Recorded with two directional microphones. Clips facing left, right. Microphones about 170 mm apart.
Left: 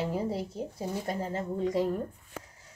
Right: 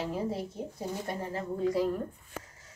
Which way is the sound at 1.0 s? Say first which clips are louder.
Left 2 dB; 20° left (ahead or behind).